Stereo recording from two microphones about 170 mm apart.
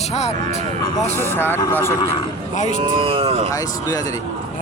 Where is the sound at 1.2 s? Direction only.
15° left (ahead or behind).